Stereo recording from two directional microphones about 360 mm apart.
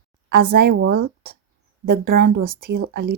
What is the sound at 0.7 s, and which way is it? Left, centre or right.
Speech, right.